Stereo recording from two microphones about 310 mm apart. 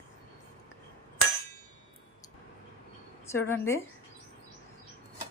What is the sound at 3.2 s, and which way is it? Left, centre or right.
Speech, centre.